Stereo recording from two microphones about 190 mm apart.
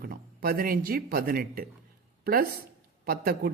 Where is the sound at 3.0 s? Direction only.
50° right (ahead or behind).